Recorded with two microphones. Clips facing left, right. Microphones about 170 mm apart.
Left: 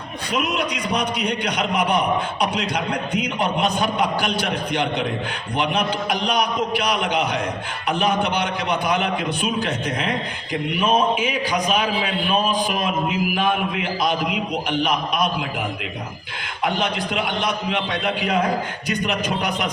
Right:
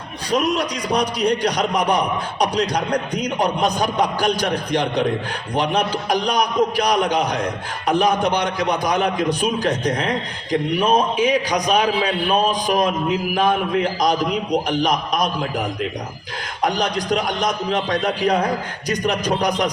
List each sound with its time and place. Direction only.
0.3 s a man's voice: 40° right (ahead or behind)